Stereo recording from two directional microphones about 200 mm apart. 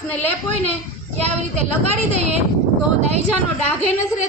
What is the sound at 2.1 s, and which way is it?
Speech, 35° right (ahead or behind).